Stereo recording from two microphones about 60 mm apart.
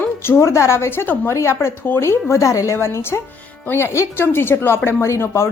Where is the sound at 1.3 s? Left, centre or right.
Left.